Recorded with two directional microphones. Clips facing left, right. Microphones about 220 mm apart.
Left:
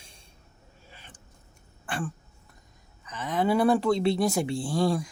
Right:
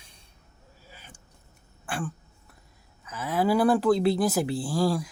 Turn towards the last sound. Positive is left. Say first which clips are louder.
# even
turn(degrees=-5)  # may be behind; listen again after turning